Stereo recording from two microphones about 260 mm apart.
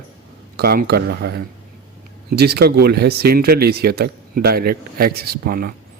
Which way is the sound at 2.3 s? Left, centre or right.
Right.